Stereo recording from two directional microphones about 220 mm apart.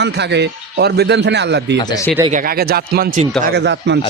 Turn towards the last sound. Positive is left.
turn(degrees=-50)  # may be behind; listen again after turning